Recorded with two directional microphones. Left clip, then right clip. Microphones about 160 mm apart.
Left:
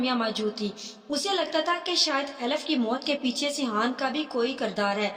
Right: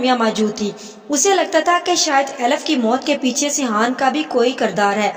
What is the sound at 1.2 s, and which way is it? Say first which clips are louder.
A woman's voice: right 12 dB; 45° right (ahead or behind).